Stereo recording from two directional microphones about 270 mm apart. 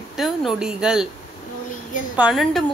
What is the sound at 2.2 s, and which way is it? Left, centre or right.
Speech, centre.